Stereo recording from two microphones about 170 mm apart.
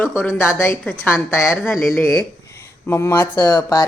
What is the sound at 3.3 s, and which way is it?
Speech, 25° left (ahead or behind).